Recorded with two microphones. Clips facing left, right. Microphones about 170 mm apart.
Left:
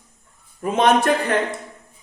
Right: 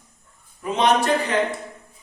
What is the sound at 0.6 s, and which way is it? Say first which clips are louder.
Speech: left 3 dB; 50° left (ahead or behind).